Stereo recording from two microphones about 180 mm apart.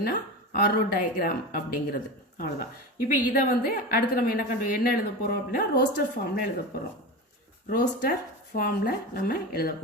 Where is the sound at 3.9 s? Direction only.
55° left (ahead or behind).